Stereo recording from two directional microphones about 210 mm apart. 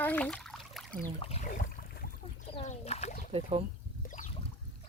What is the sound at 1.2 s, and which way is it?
Speech, 30° left (ahead or behind).